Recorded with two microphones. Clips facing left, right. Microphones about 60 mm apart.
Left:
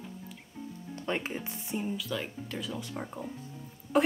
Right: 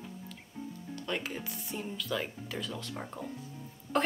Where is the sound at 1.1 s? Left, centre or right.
Left.